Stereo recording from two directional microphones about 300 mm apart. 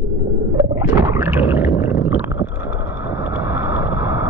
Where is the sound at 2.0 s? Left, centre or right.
Left.